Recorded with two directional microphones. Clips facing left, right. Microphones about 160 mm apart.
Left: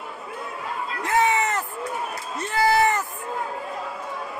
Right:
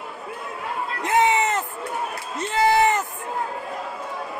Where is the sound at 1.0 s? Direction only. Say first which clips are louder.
Right 2 dB; 20° right (ahead or behind).